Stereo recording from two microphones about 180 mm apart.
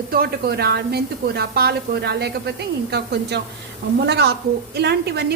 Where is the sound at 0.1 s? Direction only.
60° right (ahead or behind).